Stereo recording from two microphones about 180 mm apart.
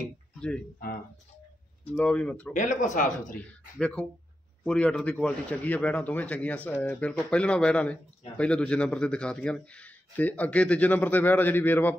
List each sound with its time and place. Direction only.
1.9 s speech: 10° left (ahead or behind)
2.5 s speech: 45° left (ahead or behind)
3.7 s speech: 5° left (ahead or behind)